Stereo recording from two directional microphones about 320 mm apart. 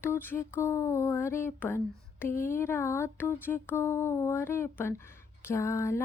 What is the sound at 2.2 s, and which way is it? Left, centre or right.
Speech, centre.